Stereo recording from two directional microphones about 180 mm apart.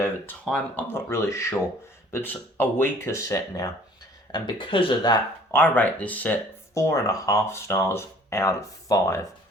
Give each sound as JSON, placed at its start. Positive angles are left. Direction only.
{"t": 0.4, "sound": "speech", "side_deg": 5}
{"t": 5.5, "sound": "speech", "side_deg": 10}